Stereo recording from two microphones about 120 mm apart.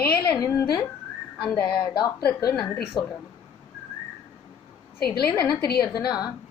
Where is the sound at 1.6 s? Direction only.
40° left (ahead or behind).